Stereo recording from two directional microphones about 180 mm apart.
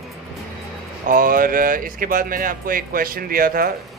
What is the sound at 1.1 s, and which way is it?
Speech, 50° right (ahead or behind).